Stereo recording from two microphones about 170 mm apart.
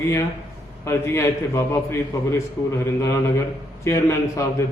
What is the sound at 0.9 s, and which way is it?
A man's voice, 15° left (ahead or behind).